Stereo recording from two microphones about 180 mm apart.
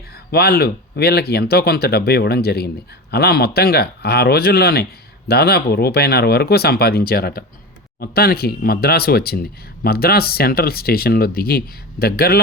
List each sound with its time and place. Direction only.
0.3 s speech: 60° left (ahead or behind)